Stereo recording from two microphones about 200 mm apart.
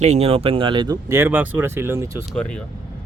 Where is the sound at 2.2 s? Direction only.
5° left (ahead or behind).